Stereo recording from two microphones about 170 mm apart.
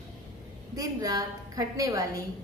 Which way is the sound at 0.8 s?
20° right (ahead or behind).